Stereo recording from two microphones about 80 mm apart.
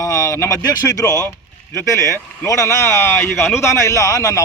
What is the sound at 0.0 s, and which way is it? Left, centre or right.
Speech, left.